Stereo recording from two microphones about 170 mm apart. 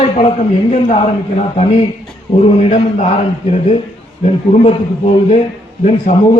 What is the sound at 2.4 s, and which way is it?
Speech, 35° left (ahead or behind).